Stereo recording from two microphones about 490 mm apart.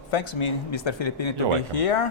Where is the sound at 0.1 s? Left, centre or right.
Left.